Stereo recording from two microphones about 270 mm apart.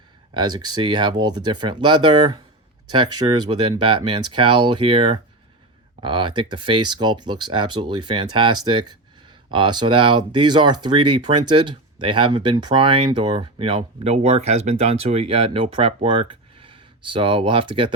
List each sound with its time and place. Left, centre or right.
0.3 s speech: centre
3.5 s speech: centre